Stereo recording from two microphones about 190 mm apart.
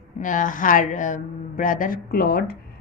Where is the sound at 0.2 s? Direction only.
45° left (ahead or behind).